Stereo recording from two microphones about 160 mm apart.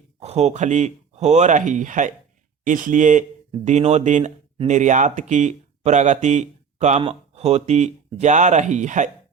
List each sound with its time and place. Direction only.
0.2 s speech: 45° right (ahead or behind)